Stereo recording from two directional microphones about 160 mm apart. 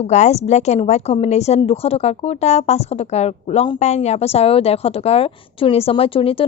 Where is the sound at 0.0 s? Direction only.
45° left (ahead or behind).